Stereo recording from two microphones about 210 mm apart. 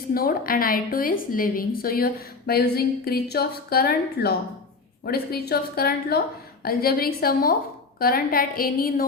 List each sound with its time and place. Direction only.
0.1 s a woman's voice: 45° left (ahead or behind)